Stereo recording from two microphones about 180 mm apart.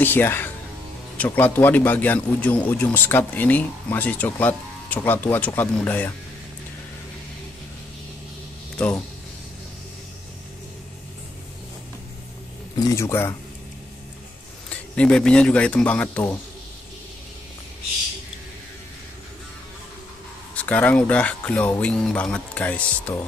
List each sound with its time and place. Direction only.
0.0 s speech: 10° left (ahead or behind)
8.7 s speech: 5° left (ahead or behind)
12.7 s speech: 20° left (ahead or behind)
14.7 s speech: 5° left (ahead or behind)
20.5 s speech: 10° left (ahead or behind)